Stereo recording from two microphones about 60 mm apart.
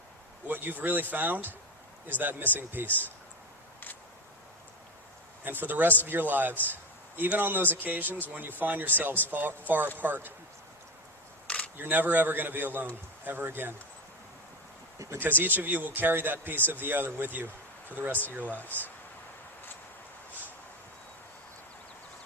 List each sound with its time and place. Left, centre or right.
0.4 s speech: right
5.5 s speech: right
11.4 s camera: left
11.8 s speech: right
15.2 s speech: right
18.5 s speech: left